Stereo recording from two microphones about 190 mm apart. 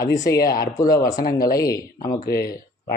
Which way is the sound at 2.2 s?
55° left (ahead or behind).